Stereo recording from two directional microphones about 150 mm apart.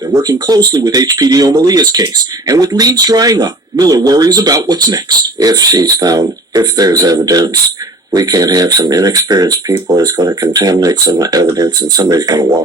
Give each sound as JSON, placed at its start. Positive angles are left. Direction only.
{"t": 0.1, "sound": "speech", "side_deg": -25}